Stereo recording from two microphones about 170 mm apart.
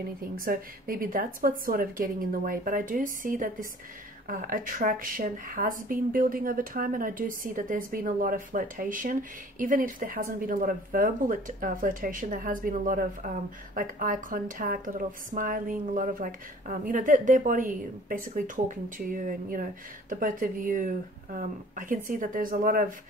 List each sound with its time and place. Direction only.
0.2 s a woman's voice: 55° right (ahead or behind)